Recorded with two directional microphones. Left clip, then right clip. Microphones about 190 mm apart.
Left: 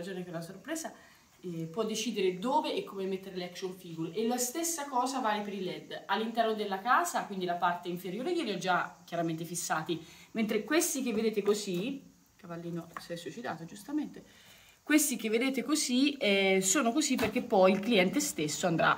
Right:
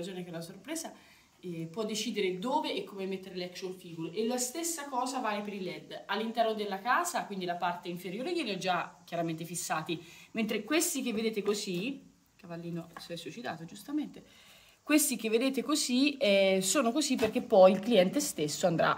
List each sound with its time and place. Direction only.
0.0 s a woman's voice: 15° right (ahead or behind)
13.1 s a woman's voice: 25° right (ahead or behind)